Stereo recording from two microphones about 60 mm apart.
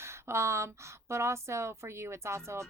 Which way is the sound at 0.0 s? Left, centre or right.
Right.